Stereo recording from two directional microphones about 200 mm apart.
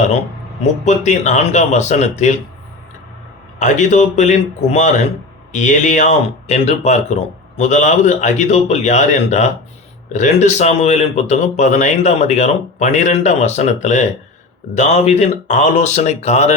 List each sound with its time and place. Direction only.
0.6 s speech: 35° left (ahead or behind)
3.6 s speech: 35° left (ahead or behind)